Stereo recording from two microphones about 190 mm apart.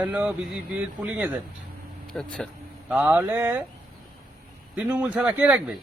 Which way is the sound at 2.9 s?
10° right (ahead or behind).